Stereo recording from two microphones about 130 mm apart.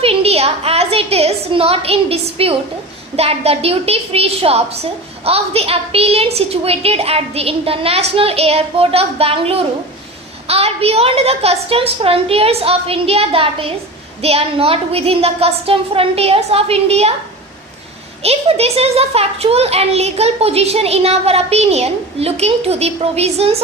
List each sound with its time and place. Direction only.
0.0 s a woman's voice: 50° right (ahead or behind)
18.2 s a woman's voice: 50° right (ahead or behind)